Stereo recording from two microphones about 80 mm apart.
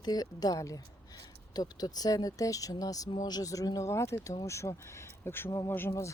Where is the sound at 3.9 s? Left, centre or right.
Left.